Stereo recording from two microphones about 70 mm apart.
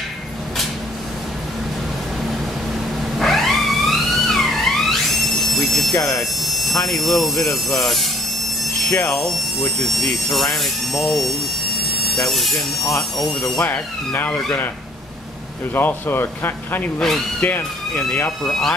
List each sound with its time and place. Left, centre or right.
3.2 s music: centre
6.1 s speech: centre
8.9 s speech: left
9.2 s speech: centre
13.6 s speech: left
15.7 s speech: left
18.4 s speech: centre